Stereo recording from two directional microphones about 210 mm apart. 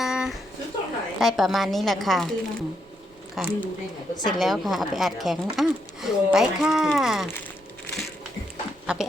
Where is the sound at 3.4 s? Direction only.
Centre (ahead or behind).